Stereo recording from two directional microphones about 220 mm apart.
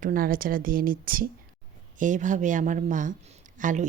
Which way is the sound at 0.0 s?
40° right (ahead or behind).